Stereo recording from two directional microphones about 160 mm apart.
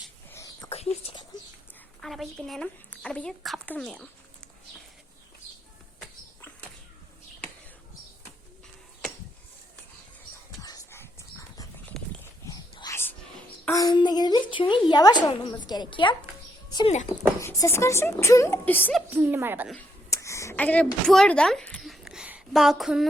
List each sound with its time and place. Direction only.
0.3 s whispering: 20° left (ahead or behind)
0.7 s a sound: 40° left (ahead or behind)
2.0 s speech: centre (ahead or behind)
10.6 s dog: 20° left (ahead or behind)
11.9 s horse: centre (ahead or behind)
12.5 s whispering: 25° left (ahead or behind)
13.7 s a woman's voice: 25° left (ahead or behind)
16.6 s a sound: 25° left (ahead or behind)
17.4 s speech: 15° left (ahead or behind)
19.1 s a woman's voice: 10° right (ahead or behind)
20.1 s a sound: 20° left (ahead or behind); by 23.0 s centre (ahead or behind)